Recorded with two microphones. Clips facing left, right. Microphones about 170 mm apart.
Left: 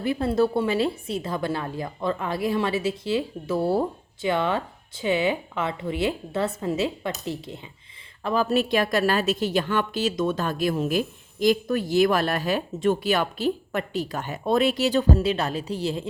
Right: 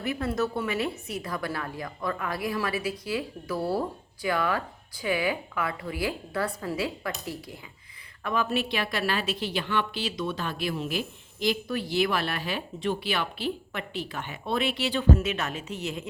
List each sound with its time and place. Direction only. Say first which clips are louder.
0.0 s a woman's voice: left 6 dB; 30° left (ahead or behind)